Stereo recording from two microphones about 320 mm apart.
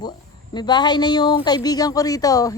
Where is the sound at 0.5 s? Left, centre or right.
Centre.